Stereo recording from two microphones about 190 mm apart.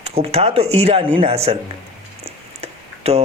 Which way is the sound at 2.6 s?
30° right (ahead or behind).